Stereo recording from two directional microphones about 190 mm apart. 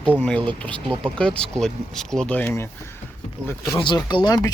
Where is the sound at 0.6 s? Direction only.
5° left (ahead or behind).